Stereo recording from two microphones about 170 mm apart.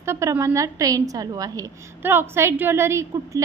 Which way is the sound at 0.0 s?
15° right (ahead or behind).